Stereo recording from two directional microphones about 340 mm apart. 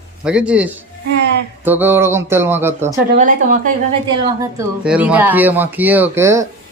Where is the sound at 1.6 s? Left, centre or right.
Centre.